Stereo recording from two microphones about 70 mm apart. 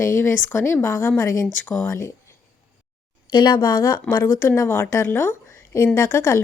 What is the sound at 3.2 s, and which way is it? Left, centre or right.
Speech, left.